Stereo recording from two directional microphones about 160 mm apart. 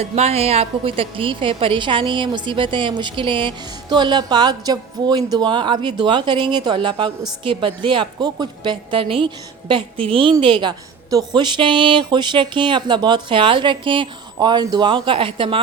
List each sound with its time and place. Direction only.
0.0 s a woman's voice: 40° right (ahead or behind)